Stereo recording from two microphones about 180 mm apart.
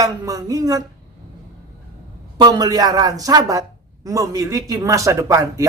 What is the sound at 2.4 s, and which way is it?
Speech, 20° right (ahead or behind).